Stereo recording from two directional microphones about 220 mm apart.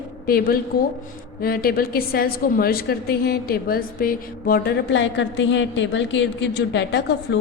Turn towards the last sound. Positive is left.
turn(degrees=50)  # may be behind; listen again after turning